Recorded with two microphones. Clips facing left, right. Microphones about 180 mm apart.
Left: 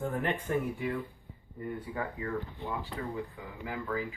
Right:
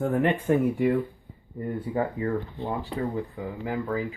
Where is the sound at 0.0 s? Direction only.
70° right (ahead or behind).